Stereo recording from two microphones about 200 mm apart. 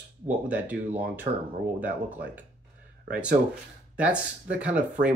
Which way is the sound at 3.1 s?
5° right (ahead or behind).